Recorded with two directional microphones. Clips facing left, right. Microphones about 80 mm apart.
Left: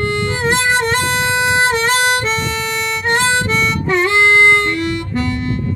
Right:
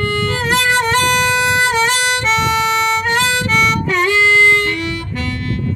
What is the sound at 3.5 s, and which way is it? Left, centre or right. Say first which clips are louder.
Harmonica: right 1 dB; left.